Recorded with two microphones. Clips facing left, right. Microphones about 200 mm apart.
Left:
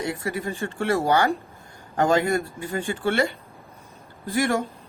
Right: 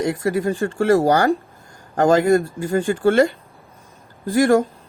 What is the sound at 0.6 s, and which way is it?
Speech, 45° right (ahead or behind).